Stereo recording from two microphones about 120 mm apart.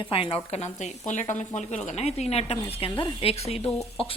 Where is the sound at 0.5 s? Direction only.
70° left (ahead or behind).